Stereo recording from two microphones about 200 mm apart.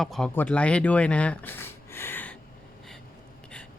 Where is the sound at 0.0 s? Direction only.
5° left (ahead or behind).